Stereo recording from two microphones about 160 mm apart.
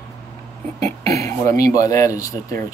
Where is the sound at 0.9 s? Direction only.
20° left (ahead or behind).